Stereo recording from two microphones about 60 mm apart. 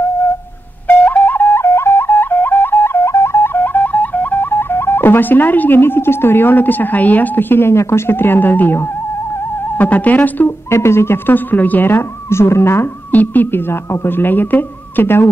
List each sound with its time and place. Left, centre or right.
0.8 s flute: left
9.8 s speech: left
10.7 s speech: left
13.1 s speech: left